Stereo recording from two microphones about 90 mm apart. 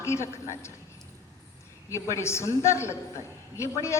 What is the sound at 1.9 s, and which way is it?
A man's voice, 30° left (ahead or behind).